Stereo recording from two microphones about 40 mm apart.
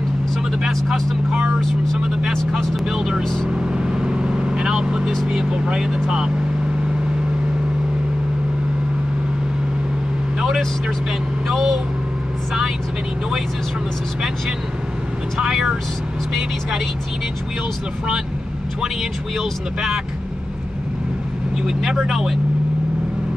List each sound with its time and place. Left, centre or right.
2.0 s speech: centre
3.7 s vehicle: right
4.7 s speech: centre
11.4 s speech: centre
15.3 s speech: centre
19.3 s speech: centre
21.5 s speech: centre